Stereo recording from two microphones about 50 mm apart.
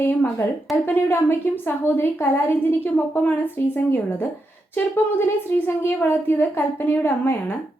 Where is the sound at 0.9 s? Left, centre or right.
Left.